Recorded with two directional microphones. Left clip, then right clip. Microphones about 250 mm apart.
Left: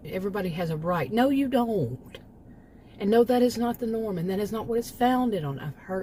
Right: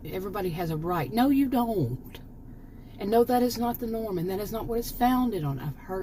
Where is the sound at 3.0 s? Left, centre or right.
Centre.